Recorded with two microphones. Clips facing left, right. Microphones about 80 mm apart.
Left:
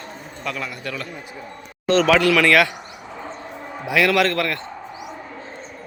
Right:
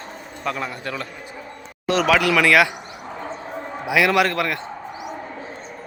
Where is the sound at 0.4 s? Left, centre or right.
Right.